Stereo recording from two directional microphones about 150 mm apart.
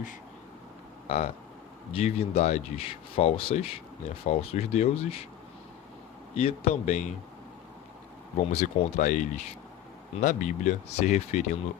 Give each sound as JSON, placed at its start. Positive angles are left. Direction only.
{"t": 1.0, "sound": "speech", "side_deg": 45}
{"t": 6.3, "sound": "speech", "side_deg": 40}
{"t": 8.5, "sound": "speech", "side_deg": 55}